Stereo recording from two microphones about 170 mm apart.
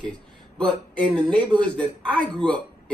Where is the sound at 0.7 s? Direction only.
30° right (ahead or behind).